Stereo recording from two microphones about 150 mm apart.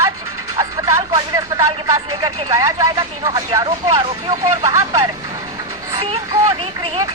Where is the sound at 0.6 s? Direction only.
20° right (ahead or behind).